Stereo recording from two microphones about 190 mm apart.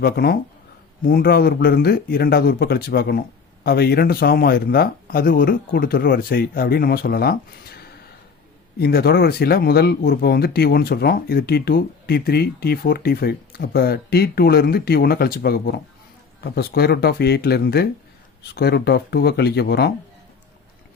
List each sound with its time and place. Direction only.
0.0 s speech: 55° left (ahead or behind)
8.8 s speech: 55° left (ahead or behind)